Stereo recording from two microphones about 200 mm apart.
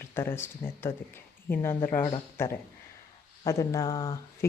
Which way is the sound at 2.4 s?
10° left (ahead or behind).